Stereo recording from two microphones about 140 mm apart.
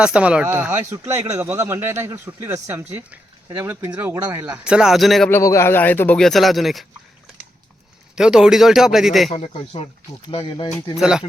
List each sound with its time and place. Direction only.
0.0 s speech: 10° right (ahead or behind)
4.5 s speech: 5° right (ahead or behind)
5.3 s speech: 20° left (ahead or behind); by 6.8 s centre (ahead or behind)
8.1 s speech: 5° right (ahead or behind)
9.3 s speech: 50° left (ahead or behind)
10.2 s speech: 35° left (ahead or behind)
10.9 s speech: 5° right (ahead or behind)